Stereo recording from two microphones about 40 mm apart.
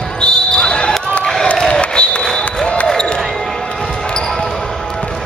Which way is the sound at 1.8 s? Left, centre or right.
Left.